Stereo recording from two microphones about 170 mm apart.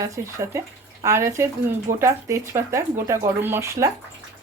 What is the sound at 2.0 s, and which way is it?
A woman's voice, 20° right (ahead or behind).